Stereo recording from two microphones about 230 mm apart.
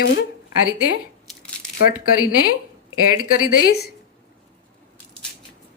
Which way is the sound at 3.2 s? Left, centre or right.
Left.